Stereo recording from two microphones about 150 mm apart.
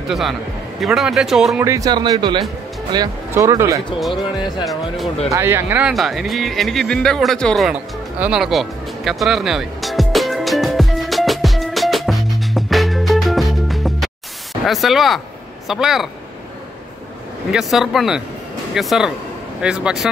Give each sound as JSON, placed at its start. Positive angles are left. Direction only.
{"t": 0.1, "sound": "a man's voice", "side_deg": 0}
{"t": 1.6, "sound": "speech", "side_deg": -20}
{"t": 4.1, "sound": "speech", "side_deg": 30}
{"t": 4.6, "sound": "a man's voice", "side_deg": 0}
{"t": 5.3, "sound": "speech", "side_deg": -15}
{"t": 5.9, "sound": "music", "side_deg": 0}
{"t": 15.7, "sound": "a man's voice", "side_deg": 0}
{"t": 17.5, "sound": "a man's voice", "side_deg": 0}